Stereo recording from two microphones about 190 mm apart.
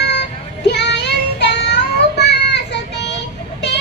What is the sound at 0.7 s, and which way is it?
Child singing, 65° left (ahead or behind).